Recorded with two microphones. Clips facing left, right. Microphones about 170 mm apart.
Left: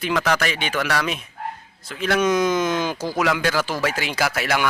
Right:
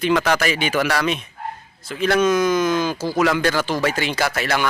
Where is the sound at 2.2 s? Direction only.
20° left (ahead or behind).